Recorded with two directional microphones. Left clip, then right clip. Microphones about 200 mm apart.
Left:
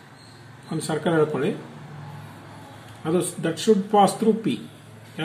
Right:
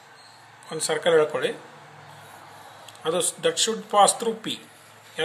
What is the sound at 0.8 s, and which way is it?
Speech, 30° right (ahead or behind).